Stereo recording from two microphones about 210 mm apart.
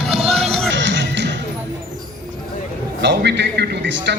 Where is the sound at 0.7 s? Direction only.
60° right (ahead or behind).